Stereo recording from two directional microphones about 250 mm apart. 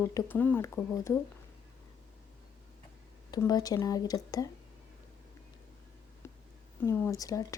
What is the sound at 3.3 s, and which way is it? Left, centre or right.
Speech, centre.